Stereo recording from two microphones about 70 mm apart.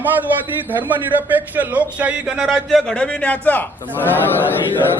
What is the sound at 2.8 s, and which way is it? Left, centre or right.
A man's voice, centre.